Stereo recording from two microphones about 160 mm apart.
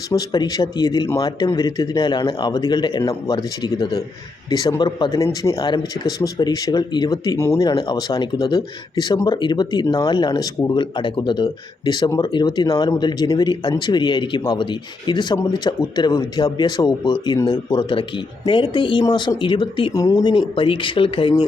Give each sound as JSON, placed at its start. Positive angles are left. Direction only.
{"t": 0.1, "sound": "speech", "side_deg": 25}